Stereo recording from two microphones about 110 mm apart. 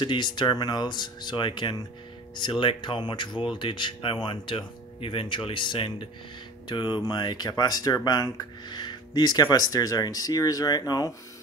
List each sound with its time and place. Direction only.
0.0 s speech: 45° left (ahead or behind)